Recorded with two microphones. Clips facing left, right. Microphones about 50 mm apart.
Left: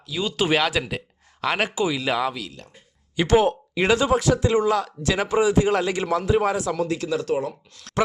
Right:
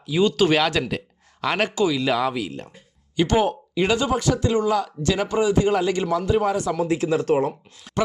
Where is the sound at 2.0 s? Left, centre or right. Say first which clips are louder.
Right 2 dB; centre.